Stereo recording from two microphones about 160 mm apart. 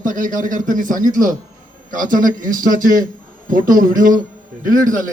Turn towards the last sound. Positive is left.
turn(degrees=-55)  # may be behind; listen again after turning